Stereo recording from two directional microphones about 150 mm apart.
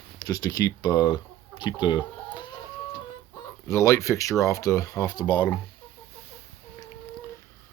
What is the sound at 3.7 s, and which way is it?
Speech, 20° left (ahead or behind).